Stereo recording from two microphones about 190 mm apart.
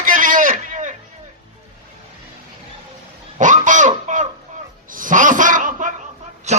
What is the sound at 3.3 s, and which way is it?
Goose, 40° right (ahead or behind).